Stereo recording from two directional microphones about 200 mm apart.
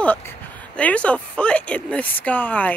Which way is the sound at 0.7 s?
5° left (ahead or behind).